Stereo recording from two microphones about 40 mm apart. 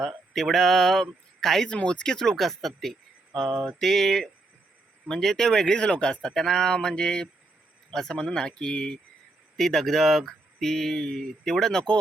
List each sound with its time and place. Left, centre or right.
0.3 s mantra: centre
1.4 s speech: centre
1.7 s speech: left
2.3 s speech: centre; by 9.0 s left
9.6 s speech: centre